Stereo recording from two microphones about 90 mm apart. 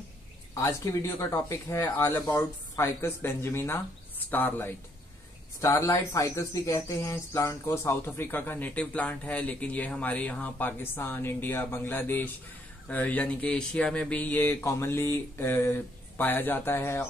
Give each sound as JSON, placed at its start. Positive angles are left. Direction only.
{"t": 0.6, "sound": "speech", "side_deg": 35}
{"t": 14.6, "sound": "speech", "side_deg": 30}